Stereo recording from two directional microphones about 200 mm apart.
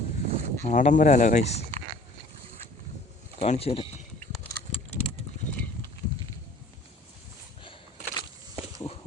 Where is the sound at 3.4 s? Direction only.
30° left (ahead or behind).